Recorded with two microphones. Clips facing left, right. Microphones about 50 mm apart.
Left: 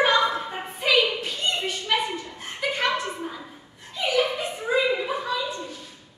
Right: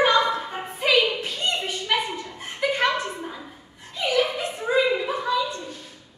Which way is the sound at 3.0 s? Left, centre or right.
Centre.